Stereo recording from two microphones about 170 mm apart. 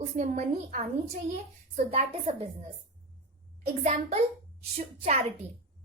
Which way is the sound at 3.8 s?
45° right (ahead or behind).